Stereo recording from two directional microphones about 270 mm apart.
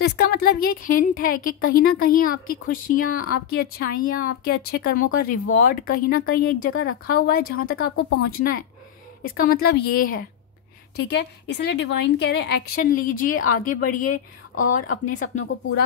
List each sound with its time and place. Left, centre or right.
0.0 s a woman's voice: left